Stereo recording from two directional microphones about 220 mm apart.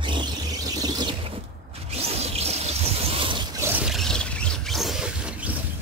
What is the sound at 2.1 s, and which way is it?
Music, 30° right (ahead or behind).